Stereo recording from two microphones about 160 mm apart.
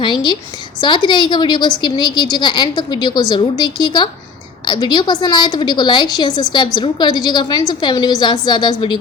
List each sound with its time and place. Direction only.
0.0 s a woman's voice: 30° left (ahead or behind)